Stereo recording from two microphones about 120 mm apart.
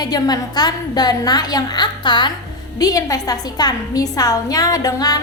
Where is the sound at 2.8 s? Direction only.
30° left (ahead or behind).